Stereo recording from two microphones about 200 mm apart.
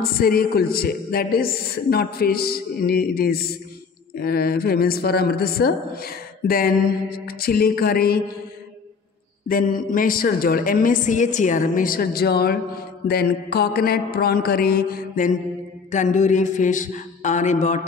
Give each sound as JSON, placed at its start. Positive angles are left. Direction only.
{"t": 0.0, "sound": "speech", "side_deg": 50}
{"t": 9.5, "sound": "speech", "side_deg": 45}
{"t": 15.9, "sound": "a sound", "side_deg": 35}